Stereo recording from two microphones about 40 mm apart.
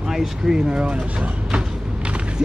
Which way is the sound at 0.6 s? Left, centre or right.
Right.